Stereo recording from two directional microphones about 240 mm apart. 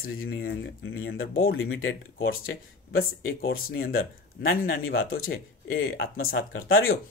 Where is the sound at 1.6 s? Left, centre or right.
Left.